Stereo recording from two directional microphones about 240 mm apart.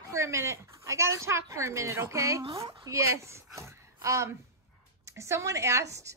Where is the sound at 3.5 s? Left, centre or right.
Centre.